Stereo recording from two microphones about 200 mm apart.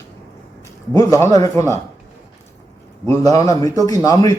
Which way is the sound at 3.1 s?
15° left (ahead or behind).